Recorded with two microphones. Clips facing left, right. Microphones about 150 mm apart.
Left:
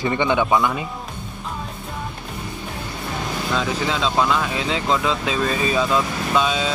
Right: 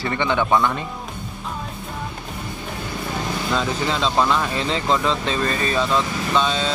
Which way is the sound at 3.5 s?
Centre (ahead or behind).